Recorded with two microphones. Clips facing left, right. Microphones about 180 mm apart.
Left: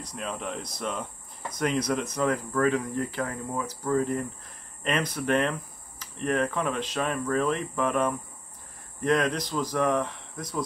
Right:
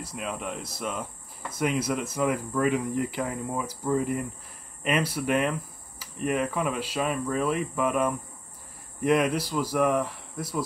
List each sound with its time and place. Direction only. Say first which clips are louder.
0.0 s speech: right 1 dB; 5° right (ahead or behind)